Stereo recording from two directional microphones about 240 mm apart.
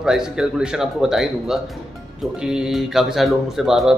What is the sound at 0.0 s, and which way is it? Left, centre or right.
A man's voice, centre.